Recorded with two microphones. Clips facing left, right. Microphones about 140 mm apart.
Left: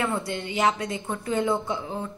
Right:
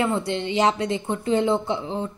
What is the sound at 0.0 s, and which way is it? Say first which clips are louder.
Speech: right 4 dB; 25° right (ahead or behind).